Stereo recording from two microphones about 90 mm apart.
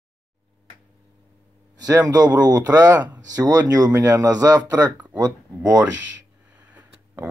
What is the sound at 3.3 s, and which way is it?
Speech, 45° right (ahead or behind).